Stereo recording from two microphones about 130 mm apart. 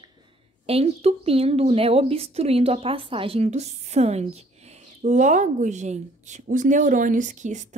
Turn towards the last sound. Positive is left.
turn(degrees=-70)  # may be behind; listen again after turning